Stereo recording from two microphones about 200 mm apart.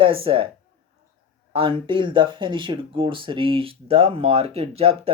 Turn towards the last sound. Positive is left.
turn(degrees=-30)  # may be behind; listen again after turning